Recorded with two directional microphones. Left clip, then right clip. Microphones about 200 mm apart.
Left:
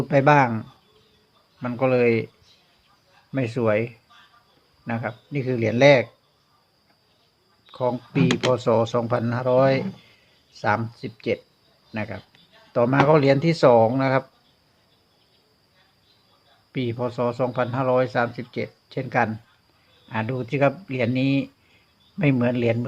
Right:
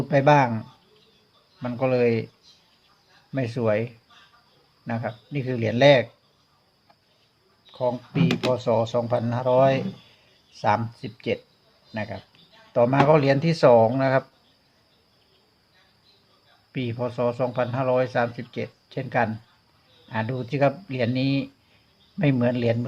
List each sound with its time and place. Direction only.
0.0 s speech: 10° left (ahead or behind)
1.6 s speech: 10° left (ahead or behind)
3.3 s speech: 10° left (ahead or behind)
7.7 s speech: 25° left (ahead or behind)
8.3 s speech: 10° left (ahead or behind)
8.5 s speech: 25° left (ahead or behind); by 14.3 s 10° left (ahead or behind)
16.7 s speech: 10° left (ahead or behind)